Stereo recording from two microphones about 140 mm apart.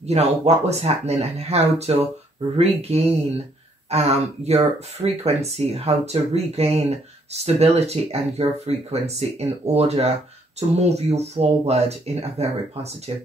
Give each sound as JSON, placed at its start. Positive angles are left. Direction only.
{"t": 0.0, "sound": "speech", "side_deg": -50}